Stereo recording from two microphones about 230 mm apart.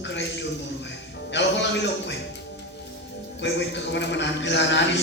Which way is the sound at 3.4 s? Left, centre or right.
Left.